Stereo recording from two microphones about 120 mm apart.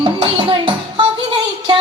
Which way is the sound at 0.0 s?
45° right (ahead or behind).